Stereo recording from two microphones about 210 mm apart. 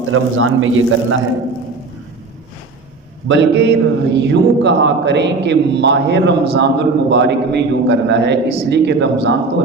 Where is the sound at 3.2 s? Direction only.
60° right (ahead or behind).